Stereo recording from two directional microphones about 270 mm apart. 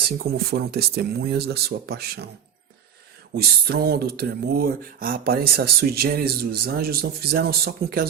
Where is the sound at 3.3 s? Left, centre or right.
Right.